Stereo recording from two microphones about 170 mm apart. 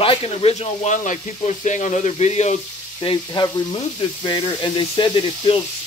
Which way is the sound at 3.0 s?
25° left (ahead or behind).